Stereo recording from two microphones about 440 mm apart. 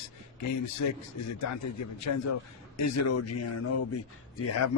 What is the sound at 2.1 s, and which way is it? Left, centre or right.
Speech, left.